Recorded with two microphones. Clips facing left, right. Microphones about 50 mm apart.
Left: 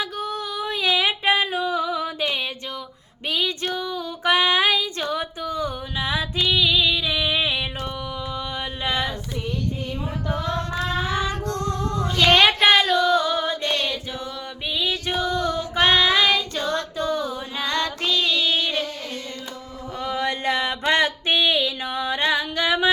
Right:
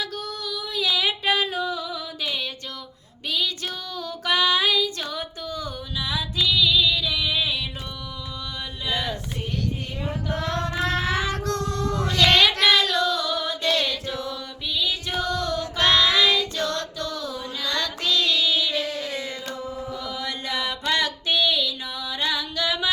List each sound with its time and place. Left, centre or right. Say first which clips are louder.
0.0 s female singing: left 4 dB; left
3.8 s female singing: left 4 dB; left
6.5 s a sound: left 1 dB; left
8.8 s female singing: left 2 dB; left
10.5 s child singing: right 2 dB; right
12.3 s child singing: left 4 dB; left
13.1 s female singing: left 5 dB; left
14.7 s female singing: left 2 dB; left
15.3 s music: left 2 dB; centre
15.7 s female singing: left 2 dB; left
16.4 s child singing: left 1 dB; right
17.1 s child singing: left 5 dB; left
17.7 s child singing: left 2 dB; left
20.0 s a sound: left 6 dB; left